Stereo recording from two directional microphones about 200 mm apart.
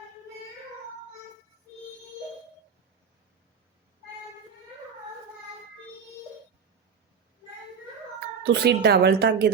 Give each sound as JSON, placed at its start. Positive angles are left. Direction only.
{"t": 8.4, "sound": "speech", "side_deg": -55}